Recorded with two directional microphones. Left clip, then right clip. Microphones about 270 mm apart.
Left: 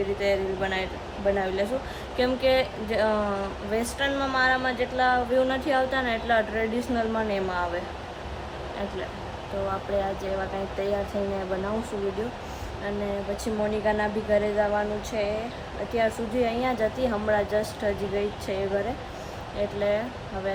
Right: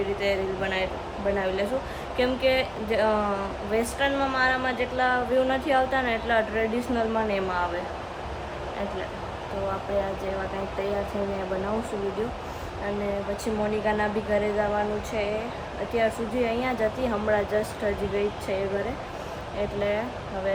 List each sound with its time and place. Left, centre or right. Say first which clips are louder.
0.2 s a woman's voice: left 1 dB; centre
13.4 s a woman's voice: left 1 dB; centre